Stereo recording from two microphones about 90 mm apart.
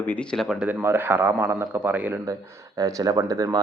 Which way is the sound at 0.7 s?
25° right (ahead or behind).